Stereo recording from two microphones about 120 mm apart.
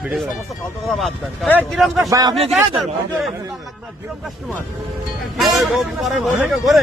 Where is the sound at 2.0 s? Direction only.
30° right (ahead or behind).